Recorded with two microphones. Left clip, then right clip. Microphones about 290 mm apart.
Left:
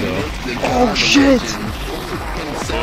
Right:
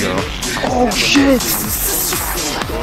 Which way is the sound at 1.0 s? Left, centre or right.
Centre.